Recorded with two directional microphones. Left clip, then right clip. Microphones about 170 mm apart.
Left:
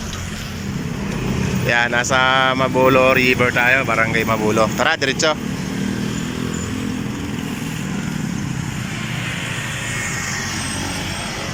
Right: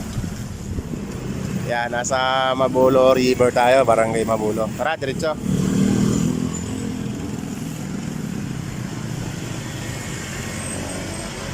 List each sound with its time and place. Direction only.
1.7 s speech: 5° right (ahead or behind)
3.0 s speech: 20° right (ahead or behind)
3.6 s speech: 30° right (ahead or behind)
3.9 s speech: 20° right (ahead or behind)
4.4 s speech: centre (ahead or behind)
4.8 s speech: 10° right (ahead or behind)